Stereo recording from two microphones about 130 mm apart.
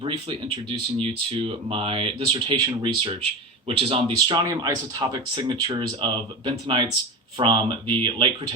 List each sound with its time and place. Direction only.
0.0 s speech: 45° right (ahead or behind)
4.4 s speech: 25° right (ahead or behind)